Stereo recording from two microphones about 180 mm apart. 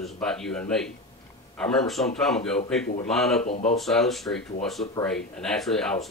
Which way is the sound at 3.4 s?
40° left (ahead or behind).